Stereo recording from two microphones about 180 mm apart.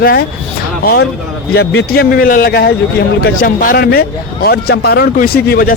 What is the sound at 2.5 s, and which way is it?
Speech, 65° left (ahead or behind).